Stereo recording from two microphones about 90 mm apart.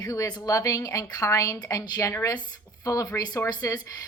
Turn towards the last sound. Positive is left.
turn(degrees=50)  # may be behind; listen again after turning